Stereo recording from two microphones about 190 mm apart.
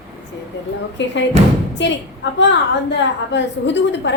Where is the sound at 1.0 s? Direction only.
70° left (ahead or behind).